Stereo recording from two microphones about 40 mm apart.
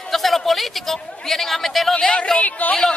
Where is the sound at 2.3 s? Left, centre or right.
Left.